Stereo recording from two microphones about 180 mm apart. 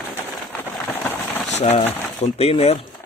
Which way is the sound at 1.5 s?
40° left (ahead or behind).